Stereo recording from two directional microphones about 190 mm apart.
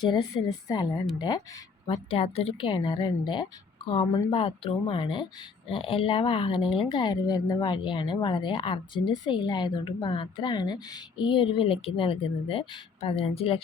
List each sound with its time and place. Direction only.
0.0 s speech: 20° left (ahead or behind)
1.9 s speech: 30° left (ahead or behind)